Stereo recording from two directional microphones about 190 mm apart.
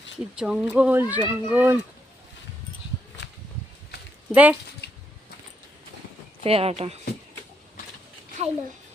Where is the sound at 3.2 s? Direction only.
65° left (ahead or behind).